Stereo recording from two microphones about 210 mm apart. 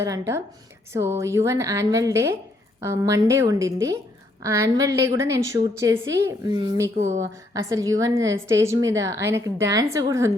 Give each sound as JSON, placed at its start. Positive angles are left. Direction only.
{"t": 0.0, "sound": "a woman's voice", "side_deg": -15}
{"t": 6.9, "sound": "speech", "side_deg": -35}
{"t": 7.5, "sound": "a woman's voice", "side_deg": -15}